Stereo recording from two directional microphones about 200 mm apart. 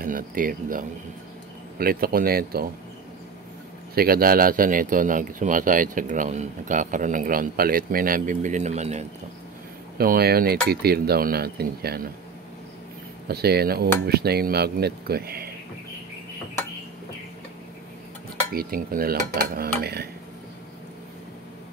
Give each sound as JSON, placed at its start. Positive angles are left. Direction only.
{"t": 0.0, "sound": "speech", "side_deg": -45}
{"t": 3.9, "sound": "speech", "side_deg": -50}
{"t": 9.9, "sound": "speech", "side_deg": -50}
{"t": 13.3, "sound": "speech", "side_deg": -50}
{"t": 18.5, "sound": "speech", "side_deg": -50}